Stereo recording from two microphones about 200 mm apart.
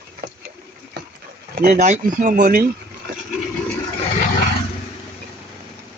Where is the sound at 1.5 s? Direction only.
45° right (ahead or behind).